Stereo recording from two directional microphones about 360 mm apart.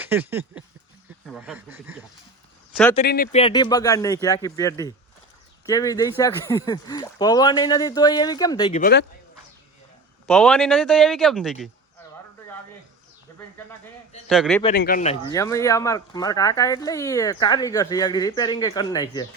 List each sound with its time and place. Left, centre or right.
0.0 s a sound: centre
1.3 s a man's voice: centre
2.9 s speech: left
10.2 s a man's voice: centre
14.3 s a man's voice: centre
14.8 s speech: left
15.3 s speech: centre